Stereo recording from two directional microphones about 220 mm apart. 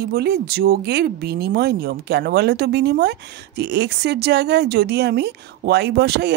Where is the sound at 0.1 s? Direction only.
45° right (ahead or behind).